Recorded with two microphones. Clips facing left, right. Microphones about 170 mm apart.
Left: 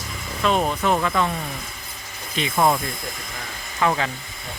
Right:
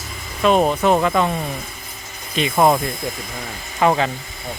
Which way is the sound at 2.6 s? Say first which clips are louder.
Right 4 dB; 35° right (ahead or behind).